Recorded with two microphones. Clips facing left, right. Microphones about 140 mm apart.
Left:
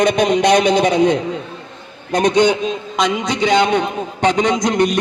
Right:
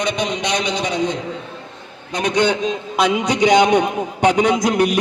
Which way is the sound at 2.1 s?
45° left (ahead or behind).